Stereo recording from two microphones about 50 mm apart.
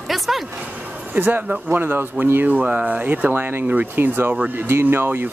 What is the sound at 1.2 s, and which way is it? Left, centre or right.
Speech, right.